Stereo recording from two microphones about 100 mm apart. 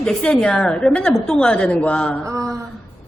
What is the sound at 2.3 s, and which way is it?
Mantra, 30° right (ahead or behind).